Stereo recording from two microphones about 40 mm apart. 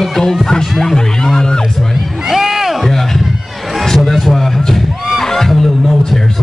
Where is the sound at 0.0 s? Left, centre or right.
Centre.